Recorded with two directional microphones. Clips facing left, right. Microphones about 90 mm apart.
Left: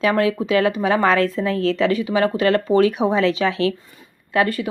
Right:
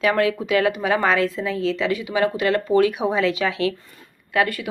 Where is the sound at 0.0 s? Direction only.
30° left (ahead or behind).